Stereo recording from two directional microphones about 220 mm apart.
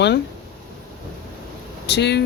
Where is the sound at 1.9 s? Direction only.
50° left (ahead or behind).